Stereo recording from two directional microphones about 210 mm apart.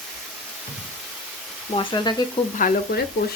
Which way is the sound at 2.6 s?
45° left (ahead or behind).